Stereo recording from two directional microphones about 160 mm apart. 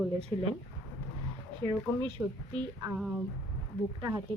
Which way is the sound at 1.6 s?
30° right (ahead or behind).